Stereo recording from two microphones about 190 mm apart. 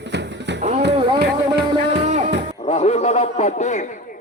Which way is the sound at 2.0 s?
35° right (ahead or behind).